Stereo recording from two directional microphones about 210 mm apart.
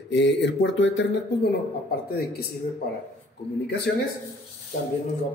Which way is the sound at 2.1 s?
45° left (ahead or behind).